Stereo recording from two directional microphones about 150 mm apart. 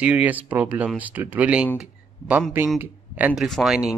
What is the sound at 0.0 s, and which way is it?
Speech, 10° right (ahead or behind).